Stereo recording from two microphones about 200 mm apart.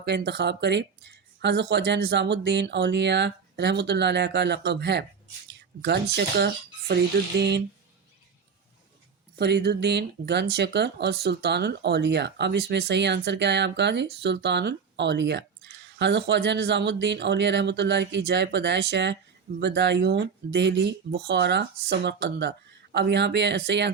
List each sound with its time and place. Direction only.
0.0 s speech: 55° right (ahead or behind)
9.4 s speech: 55° right (ahead or behind)